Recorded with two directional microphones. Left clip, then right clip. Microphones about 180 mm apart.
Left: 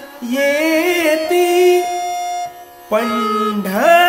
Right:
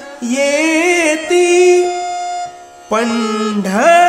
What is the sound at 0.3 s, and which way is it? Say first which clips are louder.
Music: right 1 dB; 35° right (ahead or behind).